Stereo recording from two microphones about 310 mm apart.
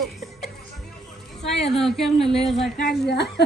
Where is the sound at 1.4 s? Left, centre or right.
Centre.